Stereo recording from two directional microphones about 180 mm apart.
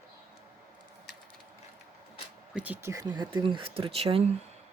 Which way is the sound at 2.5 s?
10° right (ahead or behind).